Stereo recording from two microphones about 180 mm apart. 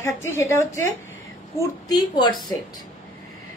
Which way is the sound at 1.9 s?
25° left (ahead or behind).